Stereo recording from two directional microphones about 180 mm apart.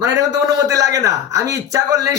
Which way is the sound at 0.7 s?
20° right (ahead or behind).